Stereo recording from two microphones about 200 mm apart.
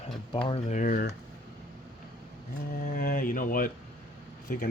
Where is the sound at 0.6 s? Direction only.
40° left (ahead or behind).